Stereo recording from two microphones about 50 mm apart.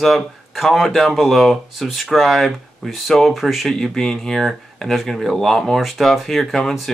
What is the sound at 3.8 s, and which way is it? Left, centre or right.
Speech, centre.